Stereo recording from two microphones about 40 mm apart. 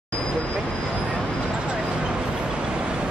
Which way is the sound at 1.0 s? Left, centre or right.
Right.